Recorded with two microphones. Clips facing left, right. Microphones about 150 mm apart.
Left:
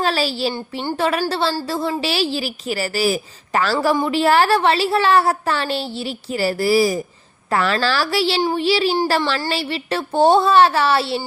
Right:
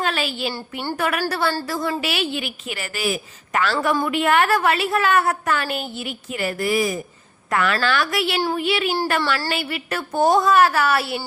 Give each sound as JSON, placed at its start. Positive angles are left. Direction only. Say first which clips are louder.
{"t": 0.0, "sound": "a woman's voice", "louder": "left 4 dB", "side_deg": 35}
{"t": 0.5, "sound": "a woman's voice", "louder": "left 3 dB", "side_deg": 25}